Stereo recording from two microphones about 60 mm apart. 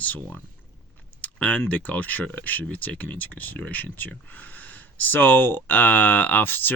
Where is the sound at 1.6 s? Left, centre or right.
Left.